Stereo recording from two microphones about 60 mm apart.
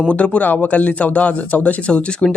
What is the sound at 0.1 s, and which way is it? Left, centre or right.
Speech, left.